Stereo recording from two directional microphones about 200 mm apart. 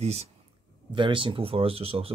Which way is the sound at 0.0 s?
30° right (ahead or behind).